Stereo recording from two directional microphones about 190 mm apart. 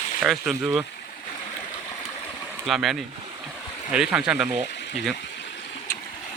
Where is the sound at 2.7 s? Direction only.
Centre (ahead or behind).